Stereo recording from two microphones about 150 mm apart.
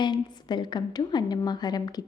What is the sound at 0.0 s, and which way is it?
A woman's voice, 30° left (ahead or behind).